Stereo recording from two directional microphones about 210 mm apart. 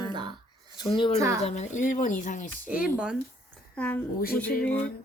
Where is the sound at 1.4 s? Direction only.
35° left (ahead or behind).